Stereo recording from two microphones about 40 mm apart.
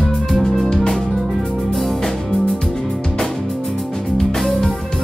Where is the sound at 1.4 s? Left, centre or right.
Centre.